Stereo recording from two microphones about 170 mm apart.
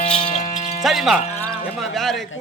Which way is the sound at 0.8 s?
Centre (ahead or behind).